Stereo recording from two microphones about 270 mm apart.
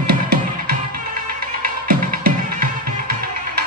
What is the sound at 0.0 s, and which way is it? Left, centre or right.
Music, right.